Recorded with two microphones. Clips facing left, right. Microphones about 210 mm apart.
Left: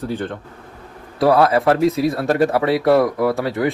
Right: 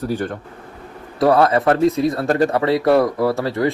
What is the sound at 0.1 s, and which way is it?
Speech, 10° right (ahead or behind).